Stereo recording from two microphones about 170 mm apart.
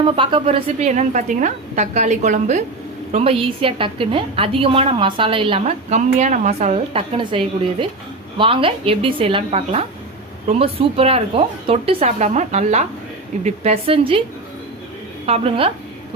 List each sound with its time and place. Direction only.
0.0 s a woman's voice: 30° right (ahead or behind)
15.3 s a woman's voice: 30° right (ahead or behind)